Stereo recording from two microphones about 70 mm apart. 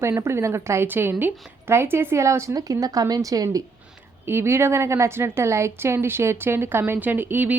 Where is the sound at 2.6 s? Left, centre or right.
Right.